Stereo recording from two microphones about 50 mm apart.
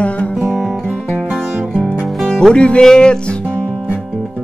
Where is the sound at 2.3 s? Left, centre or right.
Centre.